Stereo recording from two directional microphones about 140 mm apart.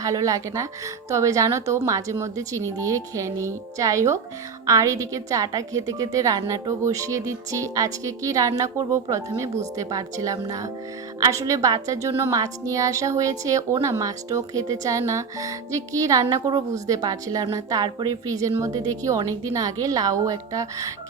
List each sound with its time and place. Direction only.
0.0 s a woman's voice: 25° right (ahead or behind)